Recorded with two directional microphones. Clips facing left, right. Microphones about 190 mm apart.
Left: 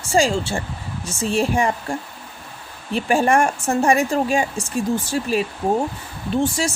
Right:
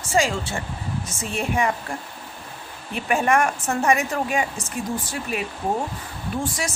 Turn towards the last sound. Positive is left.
turn(degrees=25)  # may be behind; listen again after turning